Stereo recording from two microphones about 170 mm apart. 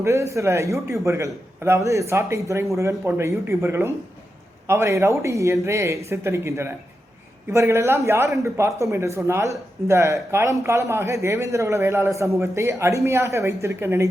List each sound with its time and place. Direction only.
0.0 s a man's voice: 15° right (ahead or behind)